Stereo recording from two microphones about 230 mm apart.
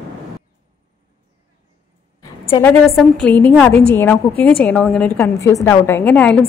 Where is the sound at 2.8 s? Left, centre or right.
Centre.